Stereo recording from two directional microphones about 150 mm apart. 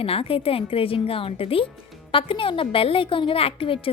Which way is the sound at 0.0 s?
40° left (ahead or behind).